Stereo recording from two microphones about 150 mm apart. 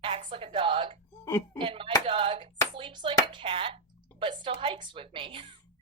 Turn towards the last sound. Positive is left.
turn(degrees=-35)  # may be behind; listen again after turning